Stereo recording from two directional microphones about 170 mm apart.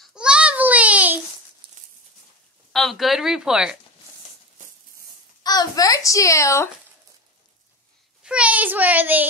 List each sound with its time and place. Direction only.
0.0 s a sound: 5° right (ahead or behind)
2.7 s speech: centre (ahead or behind)
5.4 s a child's voice: 20° left (ahead or behind)
8.2 s a child's voice: 5° right (ahead or behind)